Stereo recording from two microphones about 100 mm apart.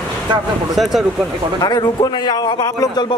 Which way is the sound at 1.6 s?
45° left (ahead or behind).